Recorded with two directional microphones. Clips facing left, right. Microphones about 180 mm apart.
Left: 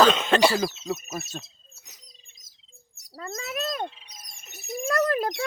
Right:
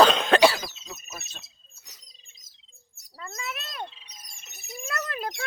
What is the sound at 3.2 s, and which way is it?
Bird, 40° left (ahead or behind).